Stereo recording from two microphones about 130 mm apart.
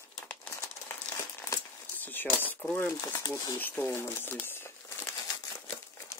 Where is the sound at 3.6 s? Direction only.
15° left (ahead or behind).